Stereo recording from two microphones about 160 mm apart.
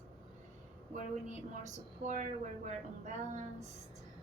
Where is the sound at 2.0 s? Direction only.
50° right (ahead or behind).